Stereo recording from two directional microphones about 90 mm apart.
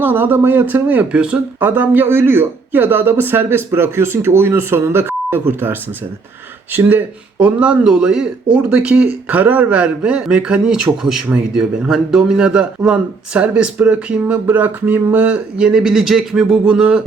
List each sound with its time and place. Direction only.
0.0 s speech: 20° right (ahead or behind)
6.7 s a man's voice: 15° right (ahead or behind)